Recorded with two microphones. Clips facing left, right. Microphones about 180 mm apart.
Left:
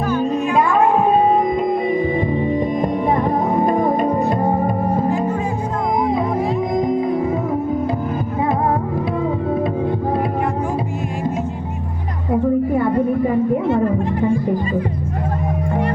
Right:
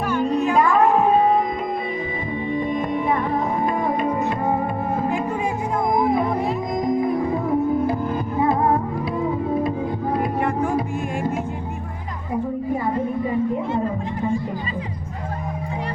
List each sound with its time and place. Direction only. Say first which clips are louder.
2.1 s music: left 6 dB; 45° left (ahead or behind)
6.7 s music: left 1 dB; 25° left (ahead or behind)
12.3 s music: left 7 dB; 65° left (ahead or behind)